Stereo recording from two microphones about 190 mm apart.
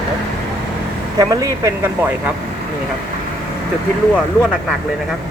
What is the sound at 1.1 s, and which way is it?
Speech, 20° right (ahead or behind).